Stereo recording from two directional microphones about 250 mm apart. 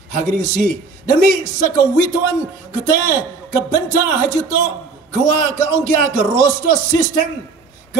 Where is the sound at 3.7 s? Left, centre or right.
Right.